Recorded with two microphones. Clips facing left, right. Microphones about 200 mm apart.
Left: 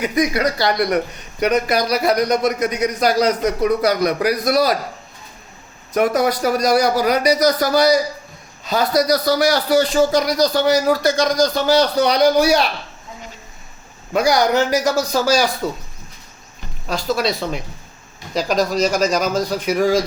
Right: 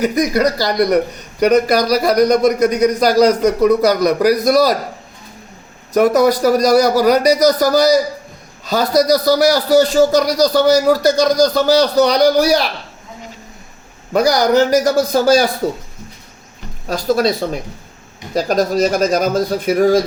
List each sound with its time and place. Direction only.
0.0 s speech: 40° right (ahead or behind)
5.9 s speech: 40° right (ahead or behind)
14.1 s speech: 40° right (ahead or behind)
14.8 s speech: 55° right (ahead or behind)
16.8 s speech: 45° right (ahead or behind)